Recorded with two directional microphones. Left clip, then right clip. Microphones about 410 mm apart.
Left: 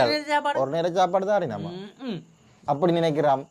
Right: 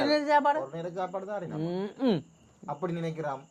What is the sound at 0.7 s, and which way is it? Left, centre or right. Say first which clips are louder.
Speech: left 12 dB; left.